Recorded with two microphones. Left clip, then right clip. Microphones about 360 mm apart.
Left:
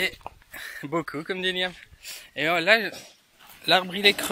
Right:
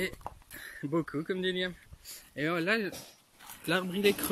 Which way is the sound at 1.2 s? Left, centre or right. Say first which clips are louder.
Left 6 dB; centre.